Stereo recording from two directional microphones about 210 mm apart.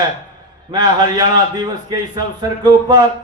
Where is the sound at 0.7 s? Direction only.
20° right (ahead or behind).